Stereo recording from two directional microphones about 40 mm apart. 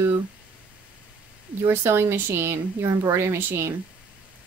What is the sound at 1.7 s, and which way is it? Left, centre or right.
A woman's voice, right.